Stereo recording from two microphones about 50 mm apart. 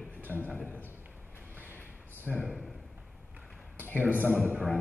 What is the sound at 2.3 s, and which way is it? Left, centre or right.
Speech, centre.